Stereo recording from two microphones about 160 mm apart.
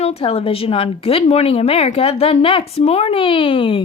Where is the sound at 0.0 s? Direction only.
40° left (ahead or behind).